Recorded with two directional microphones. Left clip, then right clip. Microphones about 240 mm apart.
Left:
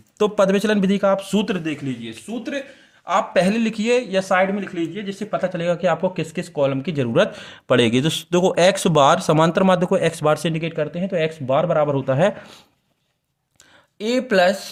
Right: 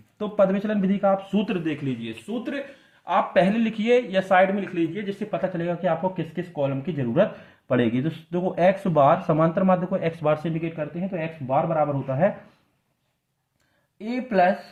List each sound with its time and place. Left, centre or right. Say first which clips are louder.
0.2 s speech: left 5 dB; left
2.3 s speech: left 3 dB; centre; by 12.3 s left
14.0 s speech: left 4 dB; left